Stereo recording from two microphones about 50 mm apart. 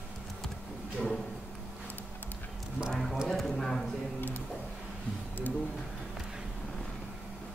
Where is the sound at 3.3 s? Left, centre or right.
Centre.